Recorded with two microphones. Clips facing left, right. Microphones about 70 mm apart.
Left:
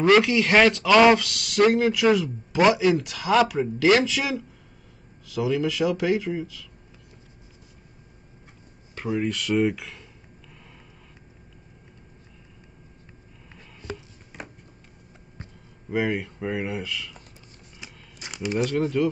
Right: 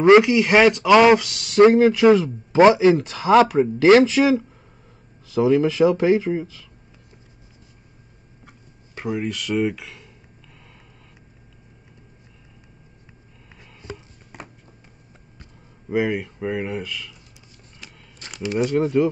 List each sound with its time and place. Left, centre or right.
0.0 s speech: right
0.3 s speech: centre; by 6.7 s right
9.1 s speech: centre
16.0 s speech: centre
17.7 s a sound: centre